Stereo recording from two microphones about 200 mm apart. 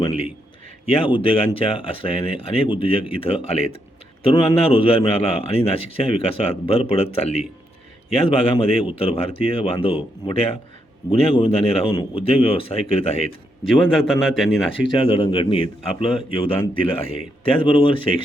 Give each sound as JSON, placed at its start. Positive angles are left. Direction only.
{"t": 0.0, "sound": "a sound", "side_deg": 30}
{"t": 0.9, "sound": "a man's voice", "side_deg": 25}
{"t": 14.1, "sound": "speech", "side_deg": 0}
{"t": 14.9, "sound": "a man's voice", "side_deg": 30}